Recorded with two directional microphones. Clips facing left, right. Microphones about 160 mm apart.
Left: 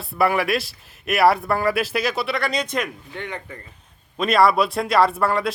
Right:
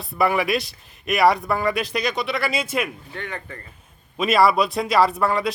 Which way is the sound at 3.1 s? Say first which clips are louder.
Left 1 dB; 15° left (ahead or behind).